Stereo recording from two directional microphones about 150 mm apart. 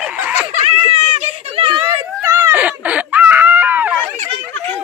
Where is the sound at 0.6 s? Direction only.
50° right (ahead or behind).